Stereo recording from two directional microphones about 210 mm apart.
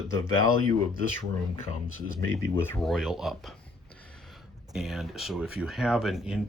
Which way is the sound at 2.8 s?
Centre (ahead or behind).